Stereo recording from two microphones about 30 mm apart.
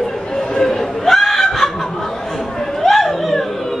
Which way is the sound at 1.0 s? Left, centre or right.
Centre.